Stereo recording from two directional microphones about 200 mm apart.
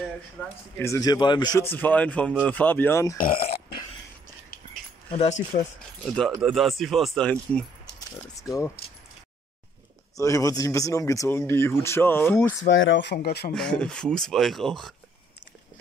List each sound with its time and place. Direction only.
0.4 s speech: 10° left (ahead or behind)
3.2 s speech: 45° left (ahead or behind)
5.5 s speech: 35° left (ahead or behind)
6.0 s speech: 5° left (ahead or behind)
10.1 s speech: 15° left (ahead or behind)
12.7 s speech: 65° left (ahead or behind)
13.5 s speech: 5° left (ahead or behind)